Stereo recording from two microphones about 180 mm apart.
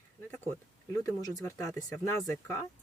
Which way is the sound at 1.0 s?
20° left (ahead or behind).